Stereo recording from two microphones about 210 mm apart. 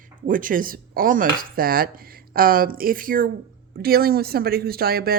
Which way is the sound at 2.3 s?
45° right (ahead or behind).